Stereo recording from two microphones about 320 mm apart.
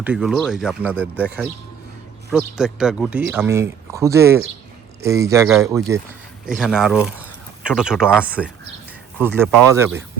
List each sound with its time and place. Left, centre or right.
0.0 s speech: centre
2.3 s speech: centre